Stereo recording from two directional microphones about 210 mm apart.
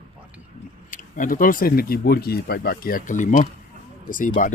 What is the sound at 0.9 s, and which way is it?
Speech, 40° left (ahead or behind).